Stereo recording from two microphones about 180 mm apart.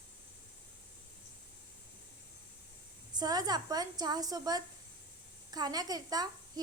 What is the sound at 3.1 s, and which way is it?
A woman's voice, 20° right (ahead or behind).